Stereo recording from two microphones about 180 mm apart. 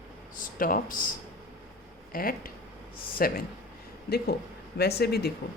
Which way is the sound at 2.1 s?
55° left (ahead or behind).